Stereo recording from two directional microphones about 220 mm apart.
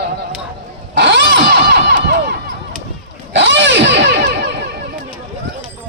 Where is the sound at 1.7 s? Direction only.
50° right (ahead or behind).